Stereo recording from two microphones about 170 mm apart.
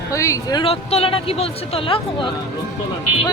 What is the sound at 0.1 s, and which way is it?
Speech, 20° left (ahead or behind).